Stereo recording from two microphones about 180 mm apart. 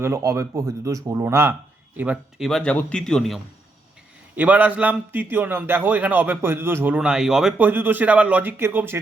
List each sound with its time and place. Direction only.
0.0 s a man's voice: 15° right (ahead or behind)
2.5 s speech: 5° left (ahead or behind)
4.4 s a man's voice: 10° right (ahead or behind)